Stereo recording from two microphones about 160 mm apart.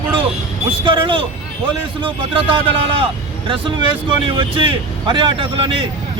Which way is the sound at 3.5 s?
30° right (ahead or behind).